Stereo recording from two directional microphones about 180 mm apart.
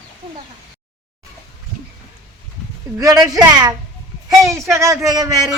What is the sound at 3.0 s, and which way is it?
A woman's voice, 20° right (ahead or behind).